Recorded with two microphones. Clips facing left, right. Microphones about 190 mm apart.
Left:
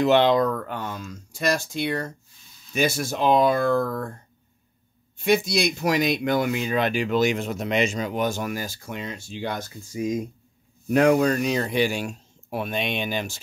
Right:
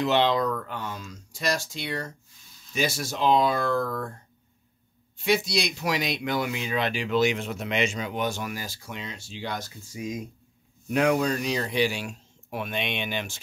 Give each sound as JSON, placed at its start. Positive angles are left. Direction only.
{"t": 0.0, "sound": "speech", "side_deg": 50}
{"t": 5.1, "sound": "speech", "side_deg": 50}